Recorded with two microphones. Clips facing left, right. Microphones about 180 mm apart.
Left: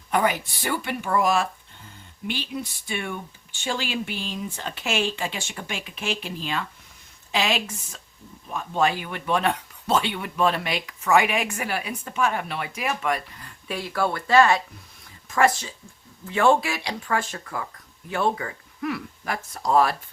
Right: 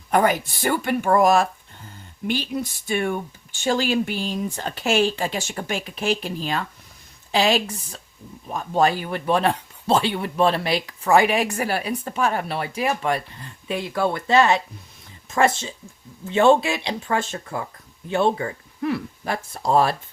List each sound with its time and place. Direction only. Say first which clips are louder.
0.1 s speech: right 4 dB; 45° right (ahead or behind); by 20.0 s 30° right (ahead or behind)